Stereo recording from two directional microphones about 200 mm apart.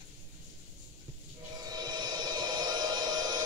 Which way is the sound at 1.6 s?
20° right (ahead or behind).